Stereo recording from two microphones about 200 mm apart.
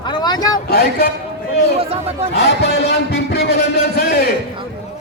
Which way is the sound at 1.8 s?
30° right (ahead or behind).